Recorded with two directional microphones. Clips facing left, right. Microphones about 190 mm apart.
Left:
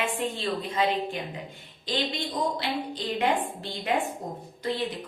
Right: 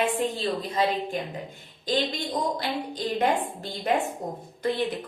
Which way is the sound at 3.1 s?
45° right (ahead or behind).